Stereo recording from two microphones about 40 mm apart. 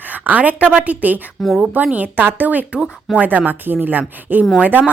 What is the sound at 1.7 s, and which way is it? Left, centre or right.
A woman's voice, right.